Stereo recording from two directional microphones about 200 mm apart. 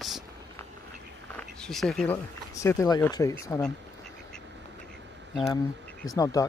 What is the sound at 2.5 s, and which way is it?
Speech, 15° left (ahead or behind).